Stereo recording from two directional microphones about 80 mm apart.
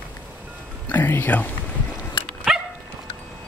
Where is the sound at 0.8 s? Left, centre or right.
Left.